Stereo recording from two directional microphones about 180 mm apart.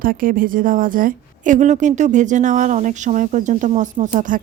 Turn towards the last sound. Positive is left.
turn(degrees=-45)  # may be behind; listen again after turning